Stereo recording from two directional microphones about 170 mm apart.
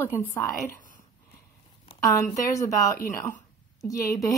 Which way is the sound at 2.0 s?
20° left (ahead or behind).